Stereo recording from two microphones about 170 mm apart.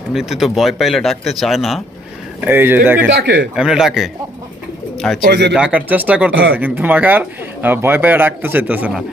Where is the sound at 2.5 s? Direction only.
10° right (ahead or behind).